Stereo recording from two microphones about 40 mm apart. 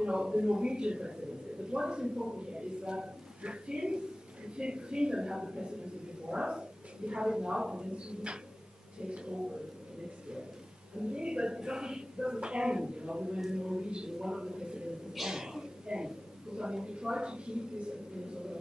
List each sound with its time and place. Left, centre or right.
0.0 s a woman's voice: right
11.1 s a woman's voice: right
15.1 s a sound: centre
16.5 s a woman's voice: centre